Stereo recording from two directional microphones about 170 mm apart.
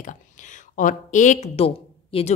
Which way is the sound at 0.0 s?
50° left (ahead or behind).